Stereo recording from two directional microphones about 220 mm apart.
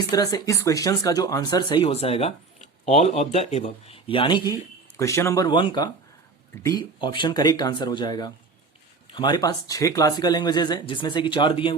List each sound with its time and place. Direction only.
0.1 s speech: 15° left (ahead or behind)